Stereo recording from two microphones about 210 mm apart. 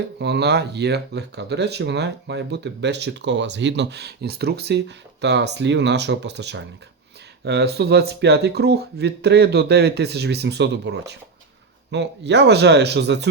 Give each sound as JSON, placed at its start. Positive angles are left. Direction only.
{"t": 0.2, "sound": "speech", "side_deg": -55}